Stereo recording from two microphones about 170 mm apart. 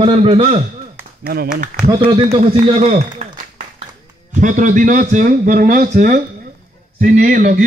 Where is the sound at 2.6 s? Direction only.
40° right (ahead or behind).